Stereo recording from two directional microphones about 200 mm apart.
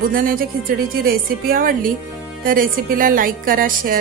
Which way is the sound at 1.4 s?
45° right (ahead or behind).